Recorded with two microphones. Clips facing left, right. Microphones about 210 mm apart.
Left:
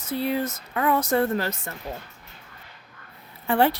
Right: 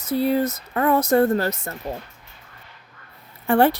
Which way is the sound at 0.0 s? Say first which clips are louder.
Right 5 dB; 40° right (ahead or behind).